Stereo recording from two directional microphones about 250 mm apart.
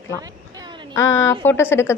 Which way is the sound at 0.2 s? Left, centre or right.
Centre.